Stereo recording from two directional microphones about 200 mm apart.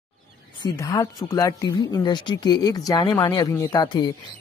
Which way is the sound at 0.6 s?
20° left (ahead or behind).